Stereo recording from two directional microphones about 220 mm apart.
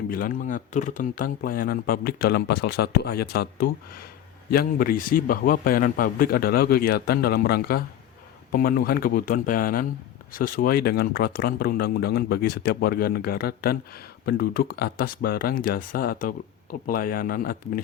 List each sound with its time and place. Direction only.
0.1 s speech: 40° left (ahead or behind)